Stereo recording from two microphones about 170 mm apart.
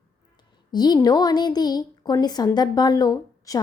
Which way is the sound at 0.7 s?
25° left (ahead or behind).